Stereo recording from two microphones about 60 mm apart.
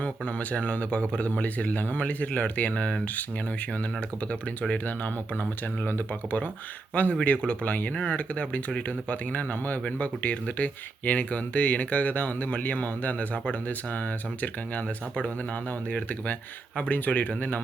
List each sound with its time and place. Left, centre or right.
0.0 s speech: left